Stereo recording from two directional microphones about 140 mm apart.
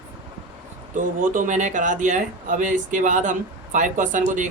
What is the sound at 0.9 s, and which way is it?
Speech, 70° right (ahead or behind).